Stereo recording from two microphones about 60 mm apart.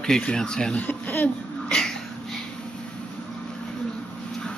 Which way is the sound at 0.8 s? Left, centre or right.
Left.